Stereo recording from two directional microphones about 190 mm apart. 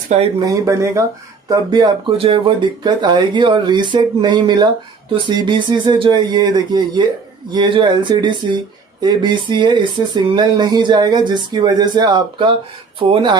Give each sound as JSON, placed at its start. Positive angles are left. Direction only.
{"t": 0.3, "sound": "speech", "side_deg": -15}